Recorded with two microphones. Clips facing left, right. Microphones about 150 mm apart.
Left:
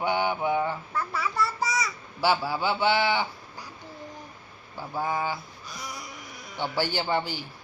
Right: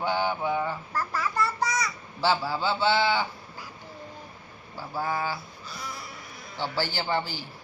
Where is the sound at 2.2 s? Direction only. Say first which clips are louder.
Left 1 dB; 10° left (ahead or behind).